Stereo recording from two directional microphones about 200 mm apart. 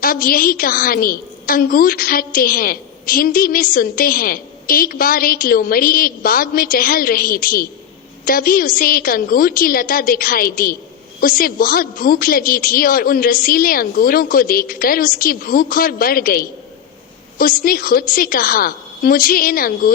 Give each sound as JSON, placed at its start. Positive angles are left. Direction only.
{"t": 0.0, "sound": "a woman's voice", "side_deg": 45}